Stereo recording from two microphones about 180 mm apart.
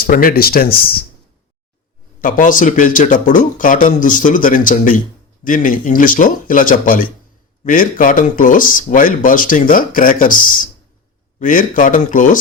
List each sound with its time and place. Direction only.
0.0 s speech: 55° left (ahead or behind)
2.2 s speech: 50° left (ahead or behind)